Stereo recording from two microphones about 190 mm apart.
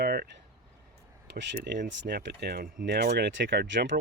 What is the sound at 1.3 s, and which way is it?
Speech, 65° right (ahead or behind).